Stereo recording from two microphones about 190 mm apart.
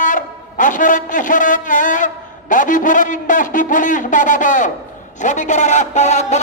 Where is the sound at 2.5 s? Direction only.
45° left (ahead or behind).